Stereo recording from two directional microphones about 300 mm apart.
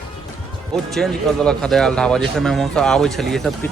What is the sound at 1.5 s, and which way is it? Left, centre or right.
Speech, centre.